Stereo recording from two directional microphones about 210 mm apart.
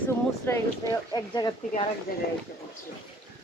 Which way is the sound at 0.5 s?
10° left (ahead or behind).